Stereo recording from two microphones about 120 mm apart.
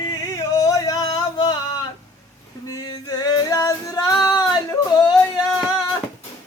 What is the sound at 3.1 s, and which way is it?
Male singing, 30° left (ahead or behind).